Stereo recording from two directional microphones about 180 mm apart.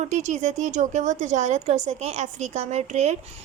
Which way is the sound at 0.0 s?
40° right (ahead or behind).